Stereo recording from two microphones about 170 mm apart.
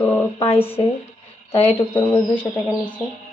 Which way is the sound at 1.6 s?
10° left (ahead or behind).